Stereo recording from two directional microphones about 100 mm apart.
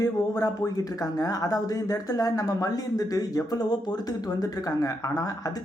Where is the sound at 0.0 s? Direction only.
35° left (ahead or behind).